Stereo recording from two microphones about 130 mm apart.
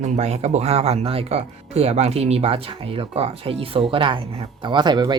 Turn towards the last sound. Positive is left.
turn(degrees=-35)  # may be behind; listen again after turning